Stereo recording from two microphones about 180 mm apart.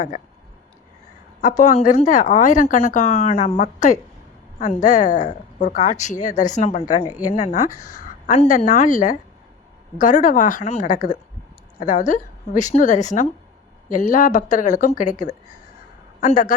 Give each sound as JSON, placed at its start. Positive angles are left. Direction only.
{"t": 1.4, "sound": "a woman's voice", "side_deg": 45}
{"t": 7.9, "sound": "a sound", "side_deg": 45}
{"t": 8.4, "sound": "a woman's voice", "side_deg": 45}